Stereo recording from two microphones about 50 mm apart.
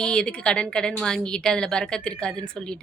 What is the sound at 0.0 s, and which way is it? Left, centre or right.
A woman's voice, centre.